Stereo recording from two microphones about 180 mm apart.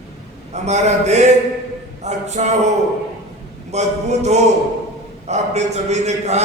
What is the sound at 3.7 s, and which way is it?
A man's voice, 40° right (ahead or behind).